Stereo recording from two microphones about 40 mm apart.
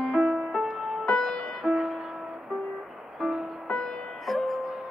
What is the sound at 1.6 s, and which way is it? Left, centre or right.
Music, centre.